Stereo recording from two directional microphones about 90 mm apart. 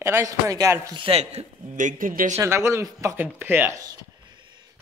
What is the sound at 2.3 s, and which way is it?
Speech, 30° right (ahead or behind).